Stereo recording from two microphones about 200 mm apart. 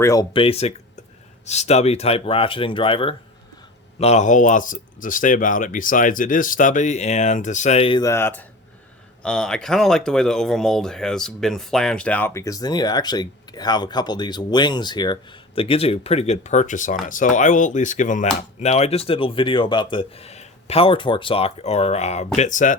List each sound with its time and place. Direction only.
0.0 s speech: 20° left (ahead or behind); by 22.7 s 40° left (ahead or behind)